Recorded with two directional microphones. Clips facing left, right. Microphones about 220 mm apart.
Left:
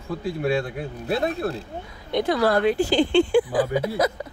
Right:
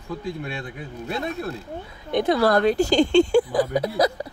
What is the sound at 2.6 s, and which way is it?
Speech, 40° right (ahead or behind).